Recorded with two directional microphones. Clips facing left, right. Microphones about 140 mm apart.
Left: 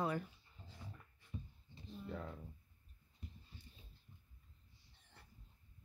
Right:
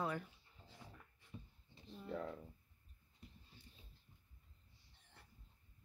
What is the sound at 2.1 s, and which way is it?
Speech, 65° right (ahead or behind).